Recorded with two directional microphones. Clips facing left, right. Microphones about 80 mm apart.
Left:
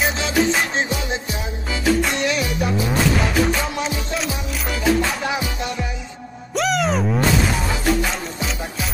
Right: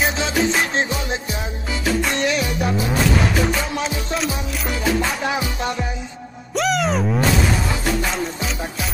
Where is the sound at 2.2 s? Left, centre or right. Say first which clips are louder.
Right 1 dB; right.